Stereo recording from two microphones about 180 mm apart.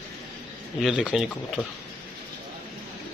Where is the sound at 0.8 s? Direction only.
Centre (ahead or behind).